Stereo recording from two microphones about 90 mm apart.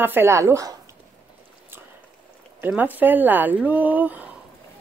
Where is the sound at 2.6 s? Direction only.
20° right (ahead or behind).